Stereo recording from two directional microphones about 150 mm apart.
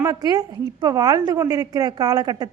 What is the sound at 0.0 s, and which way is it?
A woman's voice, 25° right (ahead or behind).